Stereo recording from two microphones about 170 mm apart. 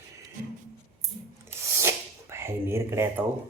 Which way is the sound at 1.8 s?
15° right (ahead or behind).